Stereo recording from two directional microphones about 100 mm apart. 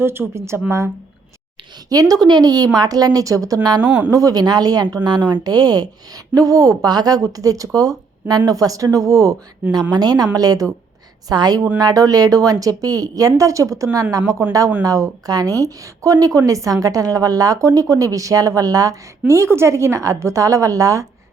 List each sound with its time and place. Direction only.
0.0 s speech: 25° right (ahead or behind)
1.9 s a woman's voice: 40° right (ahead or behind)
3.8 s speech: 15° right (ahead or behind)
4.1 s a woman's voice: 35° right (ahead or behind)